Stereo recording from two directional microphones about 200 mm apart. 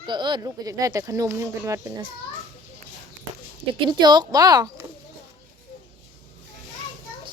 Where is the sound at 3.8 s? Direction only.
20° right (ahead or behind).